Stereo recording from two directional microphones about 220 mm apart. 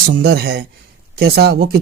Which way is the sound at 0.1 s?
45° right (ahead or behind).